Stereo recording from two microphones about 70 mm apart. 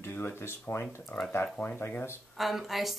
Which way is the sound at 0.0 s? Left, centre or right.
Left.